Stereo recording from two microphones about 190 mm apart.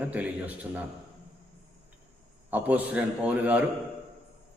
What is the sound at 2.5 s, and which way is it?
A man's voice, 10° right (ahead or behind).